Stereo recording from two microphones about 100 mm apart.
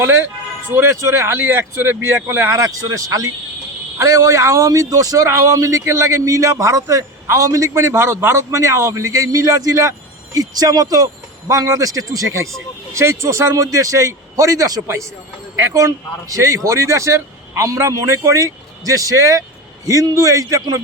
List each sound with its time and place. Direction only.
0.0 s a man's voice: 25° right (ahead or behind)